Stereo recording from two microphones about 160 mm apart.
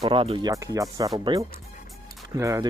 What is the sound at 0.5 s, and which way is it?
Speech, 20° right (ahead or behind).